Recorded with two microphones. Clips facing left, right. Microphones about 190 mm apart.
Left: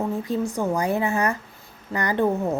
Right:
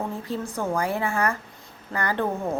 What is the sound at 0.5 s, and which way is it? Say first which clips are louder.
Speech: even; 15° left (ahead or behind).